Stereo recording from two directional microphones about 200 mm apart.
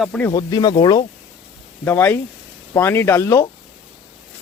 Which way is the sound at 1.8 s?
10° left (ahead or behind).